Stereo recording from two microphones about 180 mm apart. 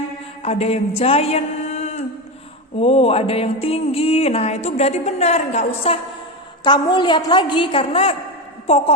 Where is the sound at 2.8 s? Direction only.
35° left (ahead or behind).